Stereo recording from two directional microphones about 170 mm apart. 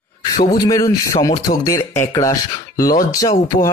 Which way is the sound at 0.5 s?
20° left (ahead or behind).